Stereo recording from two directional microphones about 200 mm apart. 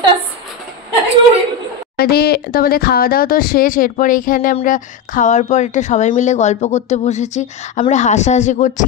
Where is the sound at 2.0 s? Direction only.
50° left (ahead or behind).